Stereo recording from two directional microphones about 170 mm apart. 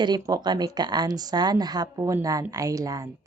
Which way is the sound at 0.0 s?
25° right (ahead or behind).